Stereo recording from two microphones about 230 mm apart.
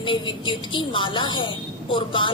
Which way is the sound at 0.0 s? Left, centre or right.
Left.